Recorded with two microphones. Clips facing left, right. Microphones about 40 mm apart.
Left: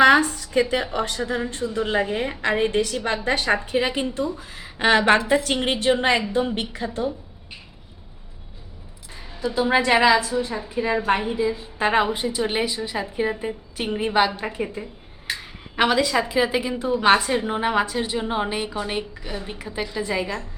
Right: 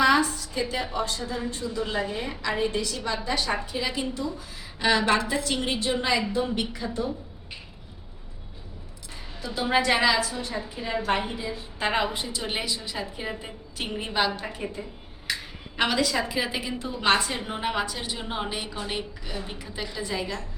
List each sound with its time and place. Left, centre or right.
0.0 s a sound: left
0.9 s a woman's voice: left
9.6 s a woman's voice: centre
11.3 s a woman's voice: centre
15.8 s a woman's voice: centre